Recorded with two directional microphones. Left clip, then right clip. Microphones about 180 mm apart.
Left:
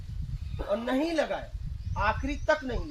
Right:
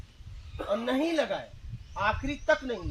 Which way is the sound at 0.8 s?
15° left (ahead or behind).